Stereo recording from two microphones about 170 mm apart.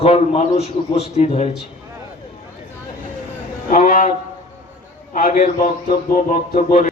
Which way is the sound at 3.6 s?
55° left (ahead or behind).